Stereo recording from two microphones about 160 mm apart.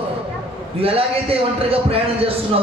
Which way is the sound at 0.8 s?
35° right (ahead or behind).